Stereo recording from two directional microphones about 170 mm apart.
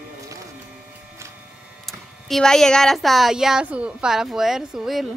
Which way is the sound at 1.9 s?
Centre (ahead or behind).